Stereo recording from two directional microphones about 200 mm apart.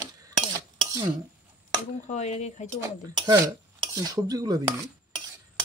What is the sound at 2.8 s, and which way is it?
Dishes, 20° right (ahead or behind).